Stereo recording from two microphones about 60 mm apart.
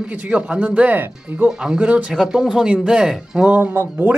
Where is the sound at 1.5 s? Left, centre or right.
Centre.